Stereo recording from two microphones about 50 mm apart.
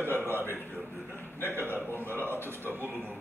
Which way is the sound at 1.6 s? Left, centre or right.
Left.